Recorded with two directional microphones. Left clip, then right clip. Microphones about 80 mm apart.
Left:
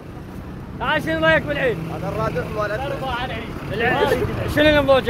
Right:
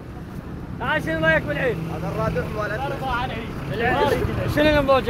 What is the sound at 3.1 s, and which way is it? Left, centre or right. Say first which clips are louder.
Speech: right 3 dB; centre.